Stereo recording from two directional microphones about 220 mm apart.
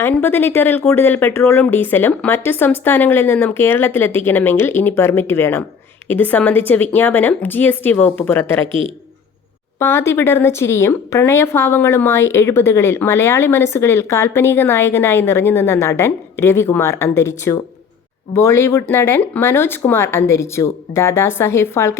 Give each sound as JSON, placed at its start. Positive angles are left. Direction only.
{"t": 0.0, "sound": "speech", "side_deg": 10}
{"t": 8.6, "sound": "a man's voice", "side_deg": -25}
{"t": 9.7, "sound": "speech", "side_deg": 10}